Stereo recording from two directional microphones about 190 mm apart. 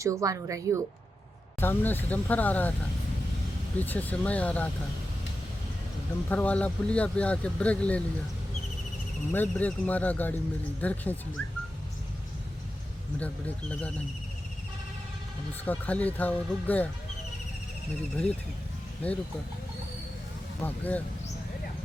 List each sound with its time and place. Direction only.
0.0 s speech: 15° right (ahead or behind)
1.6 s speech: 10° left (ahead or behind)
3.8 s speech: 10° left (ahead or behind)
6.2 s speech: 10° left (ahead or behind)
9.3 s speech: 10° left (ahead or behind)
13.1 s speech: 5° left (ahead or behind)
15.6 s speech: 10° left (ahead or behind)
19.0 s speech: 5° left (ahead or behind)
20.6 s speech: 10° left (ahead or behind)